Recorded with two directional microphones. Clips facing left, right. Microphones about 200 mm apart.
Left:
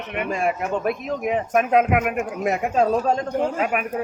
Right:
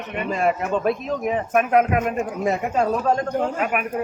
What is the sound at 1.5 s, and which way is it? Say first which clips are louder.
Speech: even; 25° left (ahead or behind).